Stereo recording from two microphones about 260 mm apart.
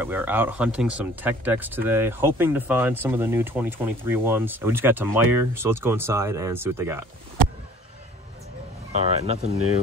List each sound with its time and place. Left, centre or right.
0.0 s speech: centre
9.2 s speech: right